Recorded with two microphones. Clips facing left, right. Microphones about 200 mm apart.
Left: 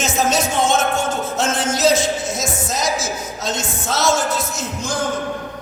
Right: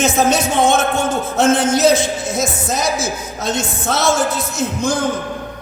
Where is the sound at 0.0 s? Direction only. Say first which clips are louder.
Right 4 dB; 60° right (ahead or behind).